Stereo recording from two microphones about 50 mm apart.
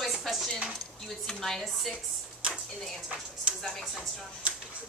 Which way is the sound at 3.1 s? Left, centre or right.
Right.